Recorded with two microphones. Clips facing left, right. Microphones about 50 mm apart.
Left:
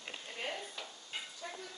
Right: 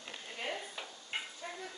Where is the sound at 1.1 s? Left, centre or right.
Right.